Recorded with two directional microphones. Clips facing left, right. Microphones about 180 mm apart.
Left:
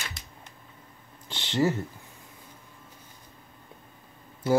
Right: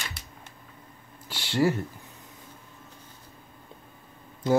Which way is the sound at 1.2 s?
10° right (ahead or behind).